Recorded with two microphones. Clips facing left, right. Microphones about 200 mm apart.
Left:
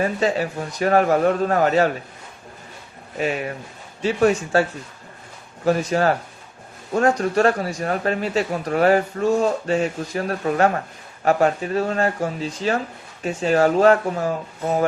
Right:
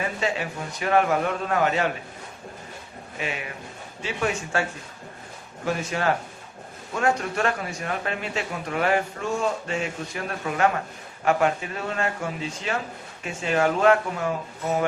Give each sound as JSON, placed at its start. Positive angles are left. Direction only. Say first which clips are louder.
{"t": 0.0, "sound": "speech", "louder": "left 7 dB", "side_deg": 40}
{"t": 3.2, "sound": "speech", "louder": "left 8 dB", "side_deg": 40}
{"t": 5.6, "sound": "speech", "louder": "left 6 dB", "side_deg": 40}